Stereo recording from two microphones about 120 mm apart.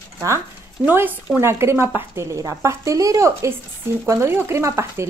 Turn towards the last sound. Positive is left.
turn(degrees=-25)  # may be behind; listen again after turning